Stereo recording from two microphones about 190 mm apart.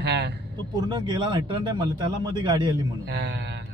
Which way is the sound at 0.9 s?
25° right (ahead or behind).